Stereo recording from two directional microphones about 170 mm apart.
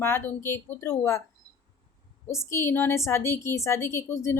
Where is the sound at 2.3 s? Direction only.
15° left (ahead or behind).